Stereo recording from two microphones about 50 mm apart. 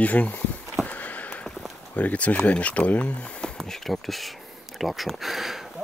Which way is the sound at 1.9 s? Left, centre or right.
Left.